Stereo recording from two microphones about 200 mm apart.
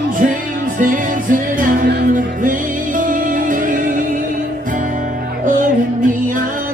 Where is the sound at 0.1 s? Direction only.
40° right (ahead or behind).